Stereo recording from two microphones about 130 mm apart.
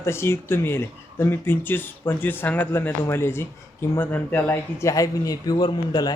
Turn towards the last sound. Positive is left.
turn(degrees=30)  # may be behind; listen again after turning